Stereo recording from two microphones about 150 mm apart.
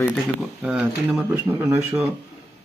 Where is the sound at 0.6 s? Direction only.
10° right (ahead or behind).